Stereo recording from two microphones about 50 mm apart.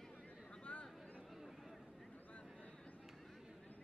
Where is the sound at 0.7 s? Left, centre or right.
Left.